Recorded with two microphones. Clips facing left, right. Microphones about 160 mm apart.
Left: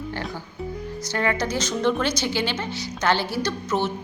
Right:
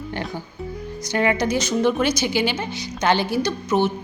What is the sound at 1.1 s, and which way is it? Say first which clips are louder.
A woman's voice: right 4 dB; 15° right (ahead or behind).